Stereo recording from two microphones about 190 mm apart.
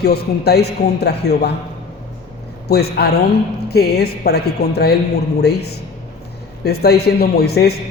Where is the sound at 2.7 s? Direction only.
55° left (ahead or behind).